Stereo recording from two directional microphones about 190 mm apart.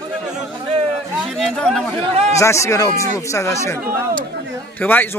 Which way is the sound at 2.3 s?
15° left (ahead or behind).